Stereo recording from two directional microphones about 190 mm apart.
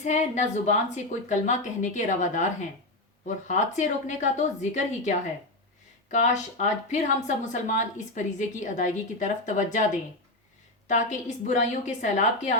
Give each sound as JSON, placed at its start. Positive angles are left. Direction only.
{"t": 0.0, "sound": "a woman's voice", "side_deg": 40}
{"t": 10.8, "sound": "a woman's voice", "side_deg": 40}